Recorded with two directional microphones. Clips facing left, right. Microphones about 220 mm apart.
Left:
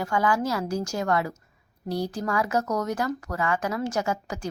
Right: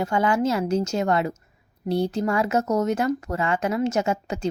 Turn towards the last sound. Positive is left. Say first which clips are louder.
# right 4 dB
turn(degrees=-25)  # may be behind; listen again after turning